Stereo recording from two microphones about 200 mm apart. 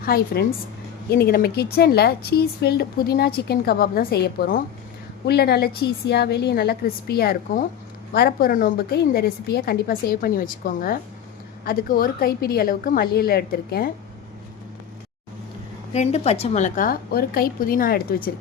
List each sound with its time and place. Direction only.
0.0 s a woman's voice: 50° left (ahead or behind)
15.9 s a woman's voice: 35° left (ahead or behind)